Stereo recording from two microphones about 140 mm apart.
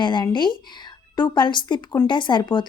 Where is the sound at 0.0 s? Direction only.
35° left (ahead or behind).